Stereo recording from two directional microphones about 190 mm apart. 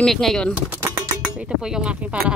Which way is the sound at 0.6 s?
10° right (ahead or behind).